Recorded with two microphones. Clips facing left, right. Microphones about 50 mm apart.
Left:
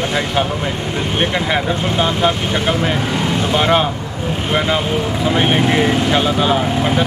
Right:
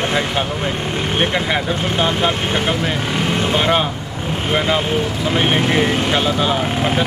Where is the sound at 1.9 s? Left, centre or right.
Centre.